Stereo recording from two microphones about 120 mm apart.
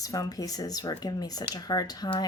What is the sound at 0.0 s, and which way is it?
Speech, 30° left (ahead or behind).